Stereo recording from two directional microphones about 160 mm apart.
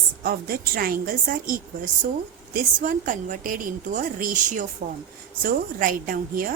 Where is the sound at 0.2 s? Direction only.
70° right (ahead or behind).